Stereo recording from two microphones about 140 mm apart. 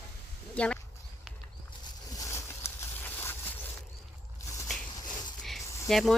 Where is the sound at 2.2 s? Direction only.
20° left (ahead or behind).